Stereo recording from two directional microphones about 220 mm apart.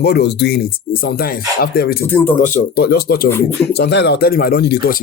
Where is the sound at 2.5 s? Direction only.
45° left (ahead or behind).